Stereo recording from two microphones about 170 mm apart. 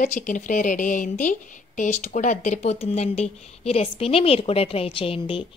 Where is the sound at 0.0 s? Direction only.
45° left (ahead or behind).